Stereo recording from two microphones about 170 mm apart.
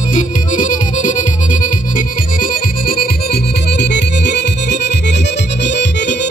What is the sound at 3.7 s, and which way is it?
Music, 90° left.